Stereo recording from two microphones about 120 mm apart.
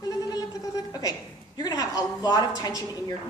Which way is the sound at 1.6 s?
35° left (ahead or behind).